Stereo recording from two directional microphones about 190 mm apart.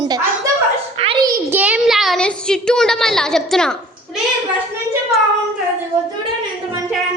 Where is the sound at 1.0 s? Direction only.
30° right (ahead or behind).